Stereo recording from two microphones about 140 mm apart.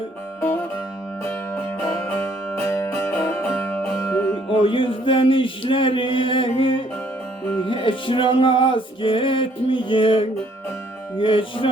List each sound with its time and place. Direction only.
1.2 s music: 15° left (ahead or behind)
4.6 s a sound: 40° left (ahead or behind)
7.6 s music: 35° left (ahead or behind)